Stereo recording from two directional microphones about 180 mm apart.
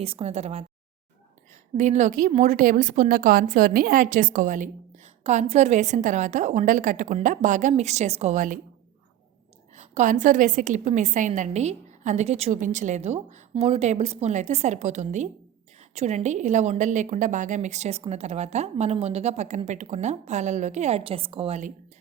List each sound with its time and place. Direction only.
0.0 s a woman's voice: 35° right (ahead or behind)
1.7 s a woman's voice: 40° right (ahead or behind)
9.7 s a woman's voice: 40° right (ahead or behind)